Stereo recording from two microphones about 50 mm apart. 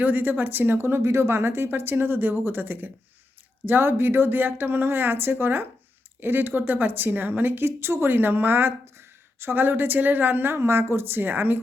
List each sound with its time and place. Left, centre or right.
0.0 s speech: right
0.8 s speech: right